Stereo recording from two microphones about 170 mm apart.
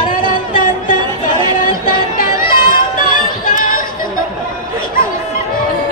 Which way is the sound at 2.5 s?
55° left (ahead or behind).